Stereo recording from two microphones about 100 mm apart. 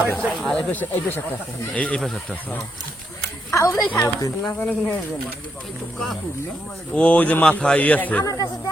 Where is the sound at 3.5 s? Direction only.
40° left (ahead or behind).